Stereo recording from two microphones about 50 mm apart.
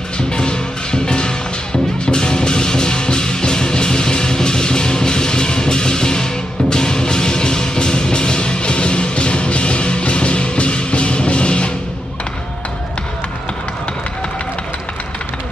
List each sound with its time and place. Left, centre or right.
0.2 s music: centre